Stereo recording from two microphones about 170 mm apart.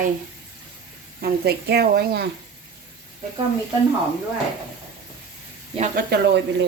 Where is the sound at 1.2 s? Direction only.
65° right (ahead or behind).